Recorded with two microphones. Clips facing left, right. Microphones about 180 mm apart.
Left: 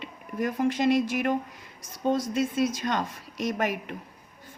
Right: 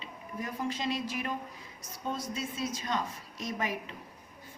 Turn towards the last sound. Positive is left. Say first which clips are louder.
# left 7 dB
turn(degrees=75)  # may be behind; listen again after turning